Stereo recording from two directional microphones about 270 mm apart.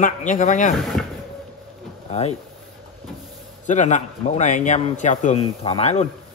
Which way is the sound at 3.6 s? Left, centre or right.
Left.